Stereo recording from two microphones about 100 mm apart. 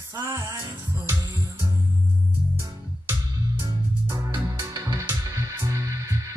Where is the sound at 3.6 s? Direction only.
30° right (ahead or behind).